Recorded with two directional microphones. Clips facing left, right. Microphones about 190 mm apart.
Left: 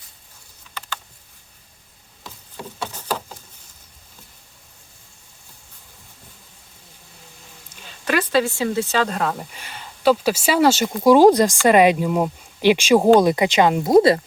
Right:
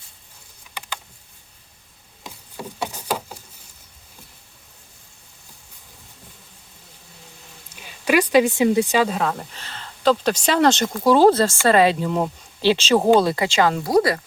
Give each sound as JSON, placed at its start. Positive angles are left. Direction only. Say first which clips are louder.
{"t": 0.7, "sound": "typing", "louder": "left 1 dB", "side_deg": -15}
{"t": 2.2, "sound": "wood", "louder": "right 1 dB", "side_deg": -15}
{"t": 7.7, "sound": "speech", "louder": "right 3 dB", "side_deg": -10}
{"t": 9.1, "sound": "speech", "louder": "even", "side_deg": 5}